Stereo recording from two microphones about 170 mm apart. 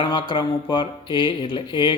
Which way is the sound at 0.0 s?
25° left (ahead or behind).